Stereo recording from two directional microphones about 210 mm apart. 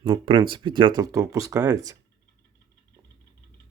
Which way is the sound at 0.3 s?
25° right (ahead or behind).